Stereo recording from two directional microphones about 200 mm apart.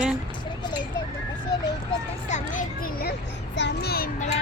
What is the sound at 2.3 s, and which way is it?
Children playing, 45° left (ahead or behind).